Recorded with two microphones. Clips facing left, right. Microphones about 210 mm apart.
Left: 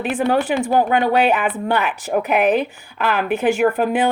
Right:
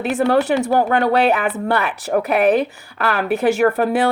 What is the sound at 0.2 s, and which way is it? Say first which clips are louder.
A woman's voice: right 3 dB; 40° right (ahead or behind).